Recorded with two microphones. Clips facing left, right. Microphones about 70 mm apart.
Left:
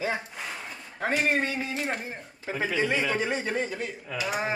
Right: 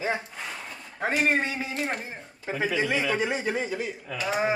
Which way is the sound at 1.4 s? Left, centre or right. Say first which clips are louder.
Even; centre.